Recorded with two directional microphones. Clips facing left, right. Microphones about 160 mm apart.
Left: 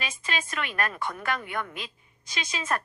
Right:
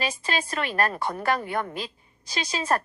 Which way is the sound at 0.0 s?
35° right (ahead or behind).